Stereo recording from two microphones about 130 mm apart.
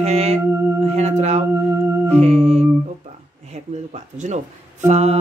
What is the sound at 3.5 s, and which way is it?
Speech, 65° right (ahead or behind).